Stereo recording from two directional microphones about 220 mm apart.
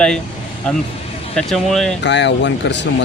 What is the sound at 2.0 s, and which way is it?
Speech, 55° left (ahead or behind).